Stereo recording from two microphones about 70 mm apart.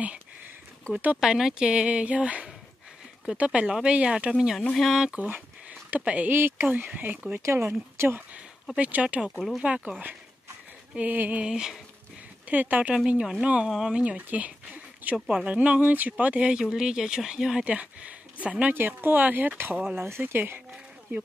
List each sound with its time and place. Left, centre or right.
1.2 s a woman's voice: centre
4.7 s speech: centre
5.0 s a woman's voice: centre
6.3 s speech: right
8.7 s a woman's voice: centre
11.0 s speech: right
11.4 s a woman's voice: centre
12.4 s speech: right
15.1 s speech: centre
15.4 s a woman's voice: centre
17.6 s speech: centre; by 21.2 s right